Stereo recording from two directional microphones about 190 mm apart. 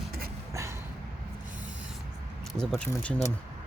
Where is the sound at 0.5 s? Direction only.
15° right (ahead or behind).